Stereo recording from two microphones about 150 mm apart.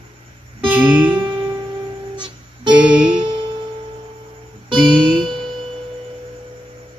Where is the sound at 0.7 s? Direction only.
10° right (ahead or behind).